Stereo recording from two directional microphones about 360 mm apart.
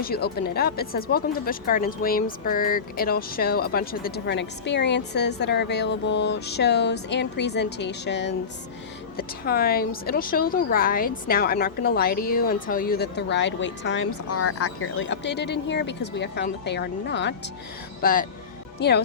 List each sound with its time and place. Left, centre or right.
0.0 s a woman's voice: left